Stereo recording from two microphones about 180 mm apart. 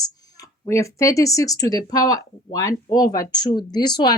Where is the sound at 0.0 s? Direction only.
20° left (ahead or behind).